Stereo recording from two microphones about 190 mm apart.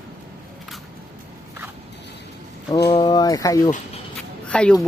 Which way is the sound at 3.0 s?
20° left (ahead or behind).